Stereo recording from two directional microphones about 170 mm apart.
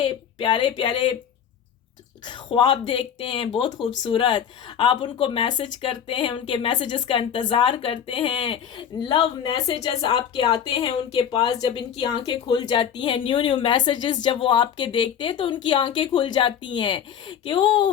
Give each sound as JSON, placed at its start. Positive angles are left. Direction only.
{"t": 0.0, "sound": "speech", "side_deg": 30}
{"t": 2.2, "sound": "speech", "side_deg": 25}